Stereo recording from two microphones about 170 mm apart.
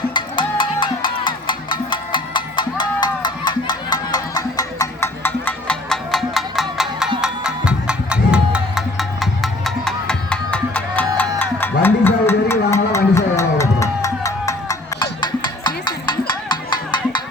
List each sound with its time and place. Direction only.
0.1 s music: 30° left (ahead or behind)